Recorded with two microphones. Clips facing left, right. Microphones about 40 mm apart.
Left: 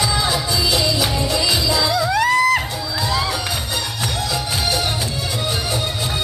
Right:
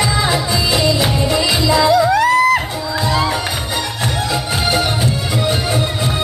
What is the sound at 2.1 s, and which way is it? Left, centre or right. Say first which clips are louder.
Music: right 3 dB; centre.